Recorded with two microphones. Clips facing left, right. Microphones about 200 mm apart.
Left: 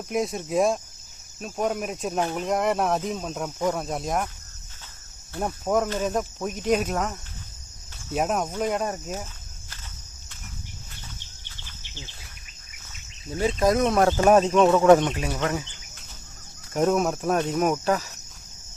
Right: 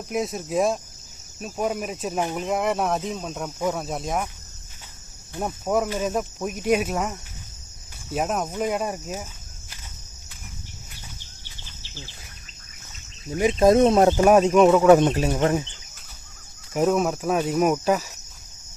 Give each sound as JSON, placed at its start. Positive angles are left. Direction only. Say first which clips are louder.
{"t": 0.1, "sound": "speech", "louder": "even", "side_deg": 0}
{"t": 5.4, "sound": "speech", "louder": "even", "side_deg": 0}
{"t": 11.4, "sound": "insect", "louder": "right 1 dB", "side_deg": -15}
{"t": 13.3, "sound": "speech", "louder": "right 5 dB", "side_deg": -15}
{"t": 14.3, "sound": "speech", "louder": "right 1 dB", "side_deg": -10}
{"t": 15.4, "sound": "speech", "louder": "right 4 dB", "side_deg": -25}
{"t": 16.7, "sound": "speech", "louder": "right 1 dB", "side_deg": 0}